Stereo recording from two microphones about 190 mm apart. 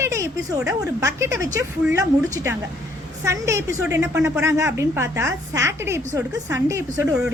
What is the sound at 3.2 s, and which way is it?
A woman's voice, 15° right (ahead or behind).